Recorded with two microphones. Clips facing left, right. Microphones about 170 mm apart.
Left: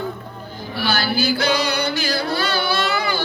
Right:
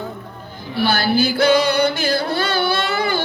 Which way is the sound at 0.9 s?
55° right (ahead or behind).